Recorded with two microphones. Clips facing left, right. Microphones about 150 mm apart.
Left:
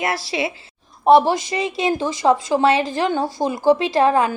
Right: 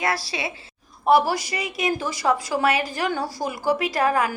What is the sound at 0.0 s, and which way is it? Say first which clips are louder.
A woman's voice: left 4 dB; 25° left (ahead or behind).